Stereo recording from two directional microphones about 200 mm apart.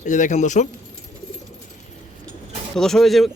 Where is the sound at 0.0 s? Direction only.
35° left (ahead or behind).